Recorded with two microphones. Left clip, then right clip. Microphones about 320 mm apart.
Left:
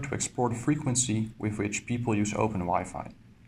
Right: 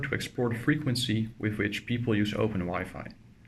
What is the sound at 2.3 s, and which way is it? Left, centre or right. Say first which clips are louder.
Speech: left 3 dB; left.